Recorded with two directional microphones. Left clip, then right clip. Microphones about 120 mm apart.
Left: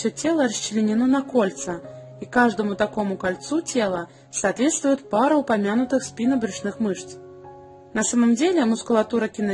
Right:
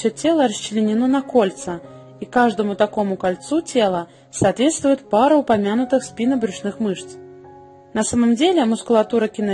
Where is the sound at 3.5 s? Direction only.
15° right (ahead or behind).